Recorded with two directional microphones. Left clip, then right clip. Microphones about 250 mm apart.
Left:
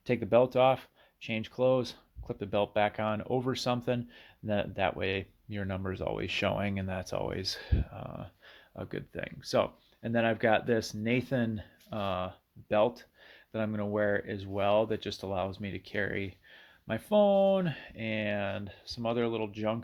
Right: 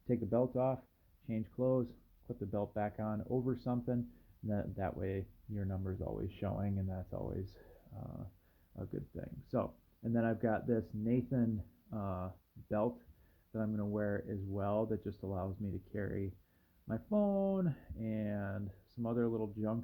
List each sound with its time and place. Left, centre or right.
0.1 s speech: left
2.2 s speech: left
3.2 s speech: left
3.5 s speech: left
13.5 s speech: left